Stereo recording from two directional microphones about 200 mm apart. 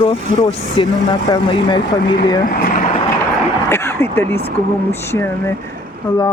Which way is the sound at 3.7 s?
15° left (ahead or behind).